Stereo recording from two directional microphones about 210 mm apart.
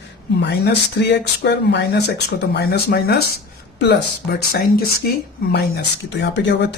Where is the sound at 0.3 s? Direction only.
55° left (ahead or behind).